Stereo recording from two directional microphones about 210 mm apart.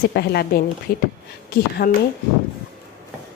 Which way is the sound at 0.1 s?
50° left (ahead or behind).